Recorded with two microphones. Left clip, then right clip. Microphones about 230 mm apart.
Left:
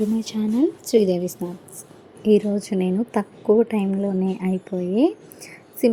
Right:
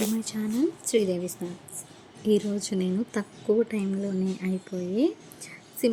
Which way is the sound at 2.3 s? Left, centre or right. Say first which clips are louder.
Left 7 dB; centre.